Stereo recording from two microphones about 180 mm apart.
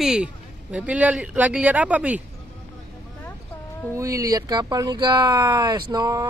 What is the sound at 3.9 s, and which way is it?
Speech, 15° right (ahead or behind).